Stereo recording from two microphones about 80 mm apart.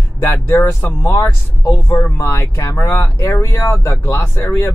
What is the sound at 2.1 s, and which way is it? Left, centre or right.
A man's voice, left.